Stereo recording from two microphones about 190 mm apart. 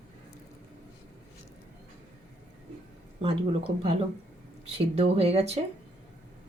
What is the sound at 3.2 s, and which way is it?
Speech, 30° right (ahead or behind).